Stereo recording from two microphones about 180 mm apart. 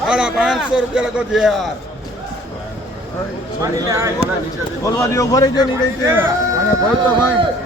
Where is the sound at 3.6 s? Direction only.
15° right (ahead or behind).